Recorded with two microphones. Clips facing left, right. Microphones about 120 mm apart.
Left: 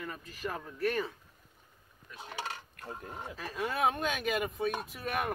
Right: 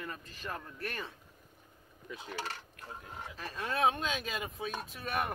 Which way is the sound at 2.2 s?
15° left (ahead or behind).